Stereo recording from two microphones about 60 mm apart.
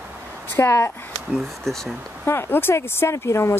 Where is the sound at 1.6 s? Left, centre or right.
Centre.